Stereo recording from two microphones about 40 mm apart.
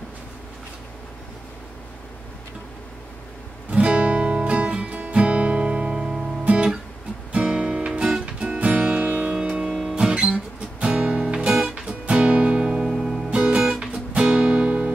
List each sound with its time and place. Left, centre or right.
3.7 s music: right
6.4 s guitar: right
7.3 s music: right
8.5 s music: right
9.3 s music: right
11.7 s music: right
12.9 s music: centre
13.7 s music: right